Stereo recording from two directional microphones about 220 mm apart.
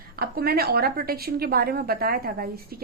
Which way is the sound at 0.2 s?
45° right (ahead or behind).